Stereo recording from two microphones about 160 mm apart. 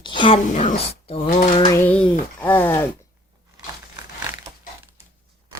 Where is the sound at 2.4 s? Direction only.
10° left (ahead or behind).